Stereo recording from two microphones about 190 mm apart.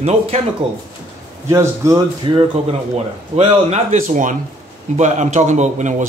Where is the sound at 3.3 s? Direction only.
35° right (ahead or behind).